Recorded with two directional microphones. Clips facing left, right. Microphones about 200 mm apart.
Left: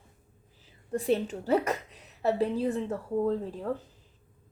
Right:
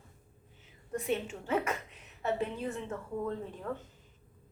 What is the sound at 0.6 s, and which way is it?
A woman's voice, 35° left (ahead or behind).